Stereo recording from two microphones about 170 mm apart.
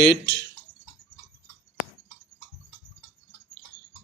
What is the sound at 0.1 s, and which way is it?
Speech, 20° right (ahead or behind).